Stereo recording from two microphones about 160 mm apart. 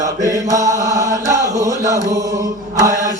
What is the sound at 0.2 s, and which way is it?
Chant, 20° right (ahead or behind).